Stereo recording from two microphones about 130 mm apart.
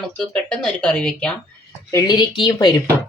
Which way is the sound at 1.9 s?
30° left (ahead or behind).